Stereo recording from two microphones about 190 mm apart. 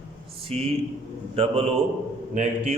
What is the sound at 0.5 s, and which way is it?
A man's voice, 30° right (ahead or behind).